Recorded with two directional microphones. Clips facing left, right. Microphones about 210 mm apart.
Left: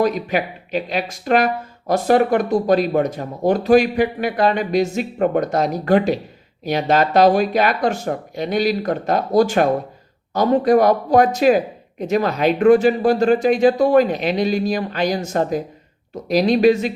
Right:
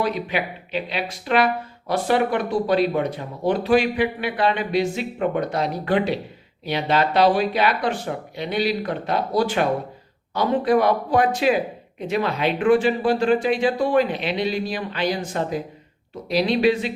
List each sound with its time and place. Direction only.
0.0 s speech: 45° left (ahead or behind)